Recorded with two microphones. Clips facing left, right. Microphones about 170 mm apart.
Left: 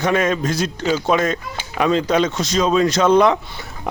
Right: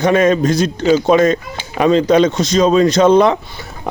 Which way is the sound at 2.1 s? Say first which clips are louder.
Right 6 dB; 30° right (ahead or behind).